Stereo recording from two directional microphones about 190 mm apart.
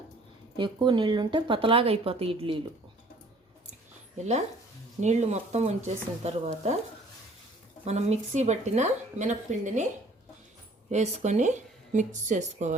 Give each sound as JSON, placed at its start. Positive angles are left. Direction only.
{"t": 0.5, "sound": "speech", "side_deg": -25}
{"t": 4.2, "sound": "speech", "side_deg": -35}
{"t": 7.9, "sound": "speech", "side_deg": -35}
{"t": 10.9, "sound": "speech", "side_deg": -35}